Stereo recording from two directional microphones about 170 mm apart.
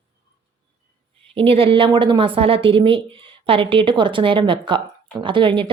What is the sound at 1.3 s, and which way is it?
A woman's voice, 35° right (ahead or behind).